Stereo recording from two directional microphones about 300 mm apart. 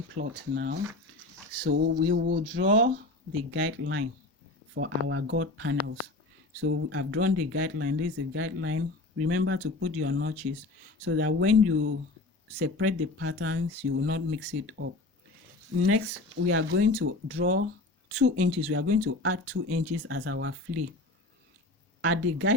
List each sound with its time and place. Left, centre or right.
0.5 s a sound: right
3.5 s speech: right
15.9 s speech: right
22.0 s speech: right